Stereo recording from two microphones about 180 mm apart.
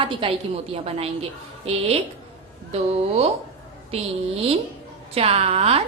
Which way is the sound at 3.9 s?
35° right (ahead or behind).